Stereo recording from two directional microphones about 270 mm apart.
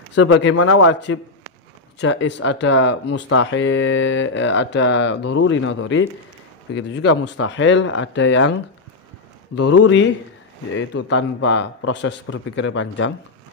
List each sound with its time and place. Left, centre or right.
0.1 s speech: left
9.6 s speech: left